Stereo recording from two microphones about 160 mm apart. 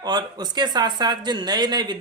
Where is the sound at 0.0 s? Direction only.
25° right (ahead or behind).